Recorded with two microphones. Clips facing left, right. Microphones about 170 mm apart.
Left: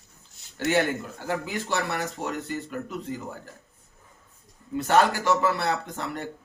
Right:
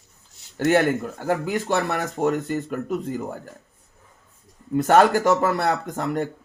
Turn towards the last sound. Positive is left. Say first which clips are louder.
# right 8 dB
turn(degrees=-50)  # may be behind; listen again after turning